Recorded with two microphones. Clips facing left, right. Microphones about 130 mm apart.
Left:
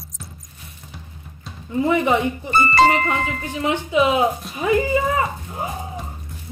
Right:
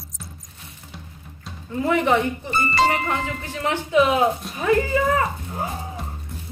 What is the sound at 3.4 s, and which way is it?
Speech, 15° left (ahead or behind).